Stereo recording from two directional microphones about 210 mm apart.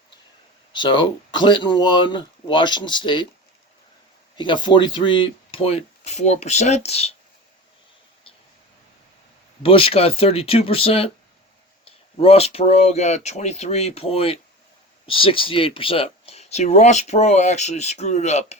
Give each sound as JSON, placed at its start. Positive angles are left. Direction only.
{"t": 0.7, "sound": "speech", "side_deg": 20}
{"t": 4.4, "sound": "speech", "side_deg": 20}
{"t": 9.6, "sound": "speech", "side_deg": 25}